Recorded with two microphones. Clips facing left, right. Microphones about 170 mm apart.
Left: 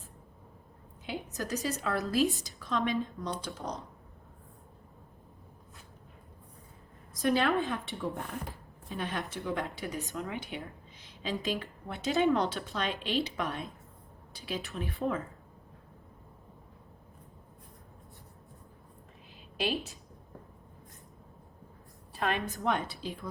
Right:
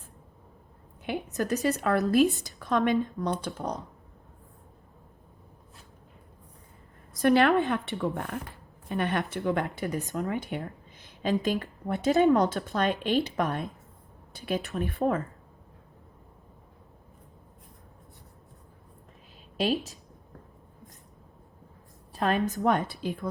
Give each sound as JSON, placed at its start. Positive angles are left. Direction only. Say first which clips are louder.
{"t": 1.0, "sound": "speech", "louder": "right 7 dB", "side_deg": -60}
{"t": 7.1, "sound": "a woman's voice", "louder": "right 6 dB", "side_deg": -65}
{"t": 10.2, "sound": "a woman's voice", "louder": "right 6 dB", "side_deg": -45}
{"t": 14.3, "sound": "speech", "louder": "right 7 dB", "side_deg": -55}
{"t": 22.1, "sound": "a woman's voice", "louder": "right 6 dB", "side_deg": -40}